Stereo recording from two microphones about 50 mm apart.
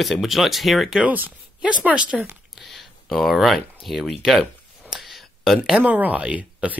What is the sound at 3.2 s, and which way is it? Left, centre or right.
Speech, centre.